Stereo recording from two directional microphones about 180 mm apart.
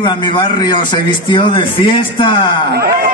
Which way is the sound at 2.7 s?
60° right (ahead or behind).